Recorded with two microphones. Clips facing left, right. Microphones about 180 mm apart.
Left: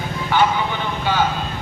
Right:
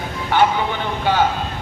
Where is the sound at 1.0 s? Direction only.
55° right (ahead or behind).